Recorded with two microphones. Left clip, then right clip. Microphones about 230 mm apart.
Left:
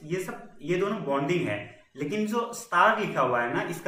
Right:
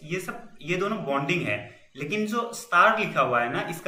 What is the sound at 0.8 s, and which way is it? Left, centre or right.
A man's voice, centre.